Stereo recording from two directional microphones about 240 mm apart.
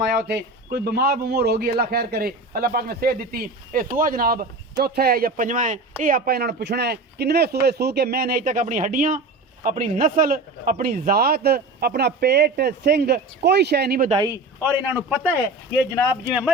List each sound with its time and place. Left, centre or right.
0.0 s a man's voice: right
14.6 s a man's voice: centre
15.3 s speech: centre